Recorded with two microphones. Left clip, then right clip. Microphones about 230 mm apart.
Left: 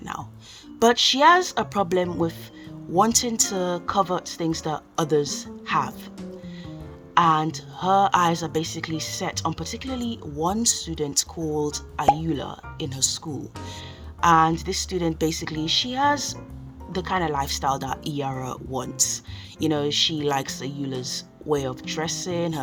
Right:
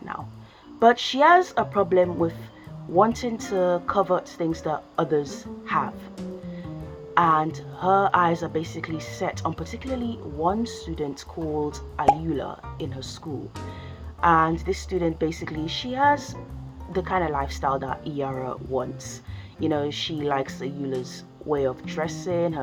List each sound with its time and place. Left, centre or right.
0.8 s a woman's voice: left
7.1 s a woman's voice: left
14.2 s a woman's voice: left